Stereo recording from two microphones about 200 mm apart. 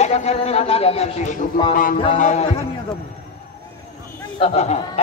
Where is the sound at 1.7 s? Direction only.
45° left (ahead or behind).